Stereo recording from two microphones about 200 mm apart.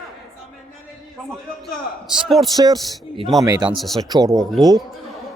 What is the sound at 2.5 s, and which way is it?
Speech, 20° right (ahead or behind).